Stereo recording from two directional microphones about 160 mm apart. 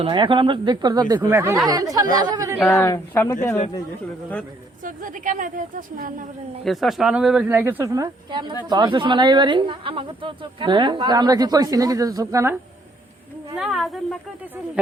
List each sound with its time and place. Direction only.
0.0 s speech: 30° right (ahead or behind)
2.6 s speech: centre (ahead or behind)
2.8 s speech: 20° left (ahead or behind)
4.8 s a woman's voice: 55° right (ahead or behind)
6.7 s speech: centre (ahead or behind); by 12.5 s 20° right (ahead or behind)
13.6 s speech: centre (ahead or behind)